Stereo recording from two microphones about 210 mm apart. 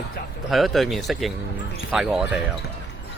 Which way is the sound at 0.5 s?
Centre (ahead or behind).